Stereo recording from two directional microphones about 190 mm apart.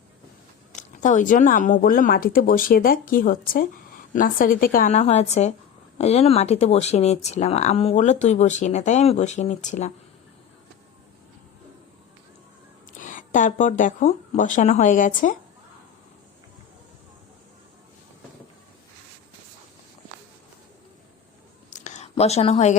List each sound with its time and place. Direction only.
0.7 s speech: 40° left (ahead or behind)
12.9 s speech: 45° left (ahead or behind)
21.7 s whispering: 40° left (ahead or behind)